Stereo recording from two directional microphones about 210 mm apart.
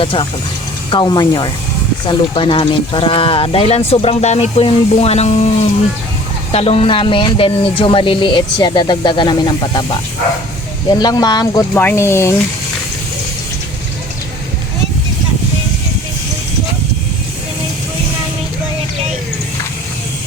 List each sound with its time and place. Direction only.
0.0 s speech: 25° left (ahead or behind)
6.5 s speech: 30° left (ahead or behind)
10.9 s speech: 20° left (ahead or behind)
11.7 s speech: 10° left (ahead or behind)